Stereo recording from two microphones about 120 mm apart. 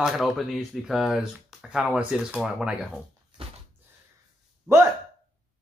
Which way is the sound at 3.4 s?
50° right (ahead or behind).